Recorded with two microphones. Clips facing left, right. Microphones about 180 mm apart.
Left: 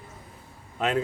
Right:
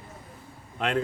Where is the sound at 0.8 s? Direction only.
5° left (ahead or behind).